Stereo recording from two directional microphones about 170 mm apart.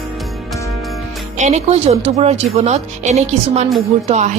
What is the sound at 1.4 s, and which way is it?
Speech, 40° right (ahead or behind).